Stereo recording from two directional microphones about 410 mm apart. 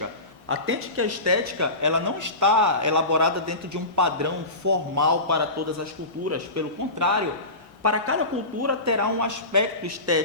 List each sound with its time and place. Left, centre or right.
0.4 s a woman's voice: right